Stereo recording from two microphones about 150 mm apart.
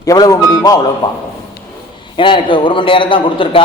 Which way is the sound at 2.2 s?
35° left (ahead or behind).